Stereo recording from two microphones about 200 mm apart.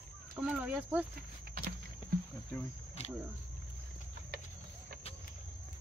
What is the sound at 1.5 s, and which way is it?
Horse, 50° right (ahead or behind).